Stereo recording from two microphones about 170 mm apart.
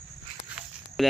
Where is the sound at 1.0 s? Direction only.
Centre (ahead or behind).